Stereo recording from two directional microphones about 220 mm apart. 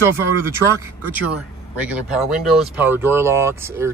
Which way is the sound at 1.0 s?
5° right (ahead or behind).